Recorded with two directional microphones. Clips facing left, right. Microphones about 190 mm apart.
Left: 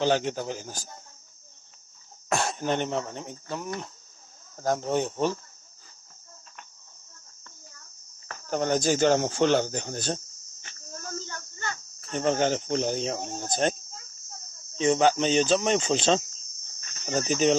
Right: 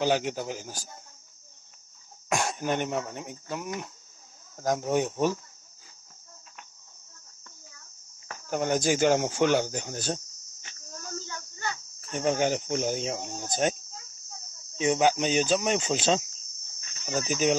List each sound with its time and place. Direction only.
0.0 s speech: 10° right (ahead or behind)
2.2 s speech: 10° right (ahead or behind)
8.5 s speech: 10° right (ahead or behind)
11.1 s insect: 50° left (ahead or behind)
12.1 s speech: 10° right (ahead or behind)
13.3 s speech: 50° left (ahead or behind)
14.8 s speech: 10° right (ahead or behind)
17.3 s speech: 10° right (ahead or behind)